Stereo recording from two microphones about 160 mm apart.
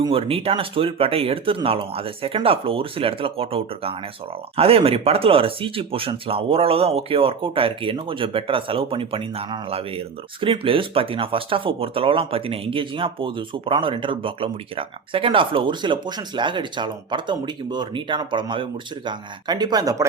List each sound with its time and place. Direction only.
0.0 s speech: 35° right (ahead or behind)